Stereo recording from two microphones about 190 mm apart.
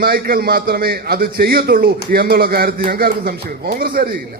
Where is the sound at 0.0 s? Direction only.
55° right (ahead or behind).